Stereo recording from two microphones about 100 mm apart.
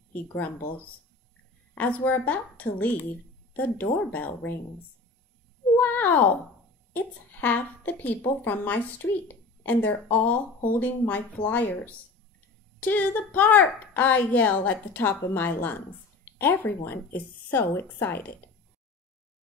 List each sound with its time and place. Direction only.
0.1 s speech: 20° left (ahead or behind)
1.8 s a woman's voice: 20° left (ahead or behind)
5.8 s cat: 15° left (ahead or behind)
6.9 s a woman's voice: 15° left (ahead or behind)